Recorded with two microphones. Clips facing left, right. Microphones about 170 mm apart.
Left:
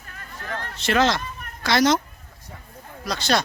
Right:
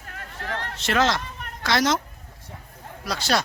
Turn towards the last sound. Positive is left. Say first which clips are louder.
# left 1 dB
turn(degrees=-5)  # may be behind; listen again after turning